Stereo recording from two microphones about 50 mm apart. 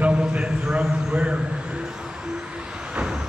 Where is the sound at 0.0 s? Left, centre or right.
Right.